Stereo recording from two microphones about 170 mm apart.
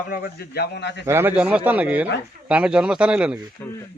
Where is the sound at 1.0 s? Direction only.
15° right (ahead or behind).